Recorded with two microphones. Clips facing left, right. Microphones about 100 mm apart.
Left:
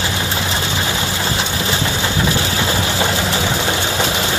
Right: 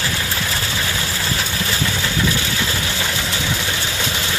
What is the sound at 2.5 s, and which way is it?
Vehicle, 35° left (ahead or behind).